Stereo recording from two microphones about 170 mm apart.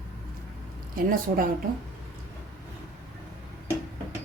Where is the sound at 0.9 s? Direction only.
55° right (ahead or behind).